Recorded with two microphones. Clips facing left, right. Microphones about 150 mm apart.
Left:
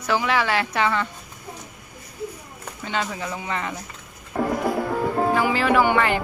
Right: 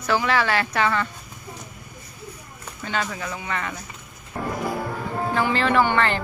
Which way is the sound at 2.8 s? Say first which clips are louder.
Even; 20° left (ahead or behind).